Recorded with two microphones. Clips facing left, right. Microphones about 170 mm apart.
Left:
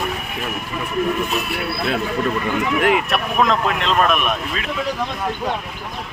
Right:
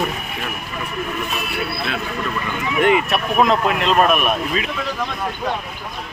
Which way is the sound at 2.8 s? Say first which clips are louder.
Right 5 dB; centre (ahead or behind).